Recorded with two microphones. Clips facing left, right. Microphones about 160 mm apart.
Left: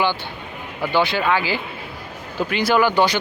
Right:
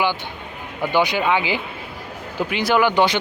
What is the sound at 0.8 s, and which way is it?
Speech, 15° right (ahead or behind).